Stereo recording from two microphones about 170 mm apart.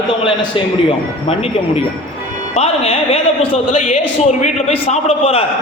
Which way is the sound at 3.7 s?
45° left (ahead or behind).